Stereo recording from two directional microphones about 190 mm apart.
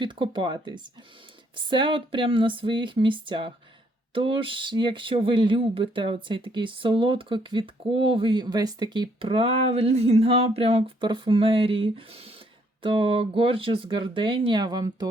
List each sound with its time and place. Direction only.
0.0 s speech: 25° right (ahead or behind)